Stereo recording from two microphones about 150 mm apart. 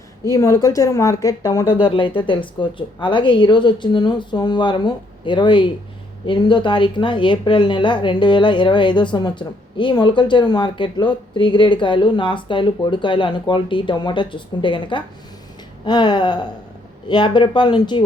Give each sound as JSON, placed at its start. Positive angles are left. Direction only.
{"t": 0.3, "sound": "speech", "side_deg": 20}
{"t": 1.9, "sound": "speech", "side_deg": 35}